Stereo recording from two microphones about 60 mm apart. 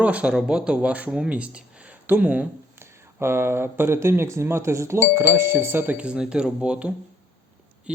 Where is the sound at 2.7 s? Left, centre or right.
Right.